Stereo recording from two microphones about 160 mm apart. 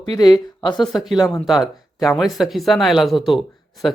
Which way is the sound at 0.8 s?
Centre (ahead or behind).